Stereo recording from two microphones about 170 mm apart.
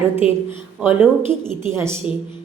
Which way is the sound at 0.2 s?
35° left (ahead or behind).